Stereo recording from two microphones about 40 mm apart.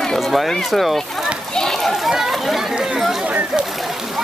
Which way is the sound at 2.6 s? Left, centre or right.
Centre.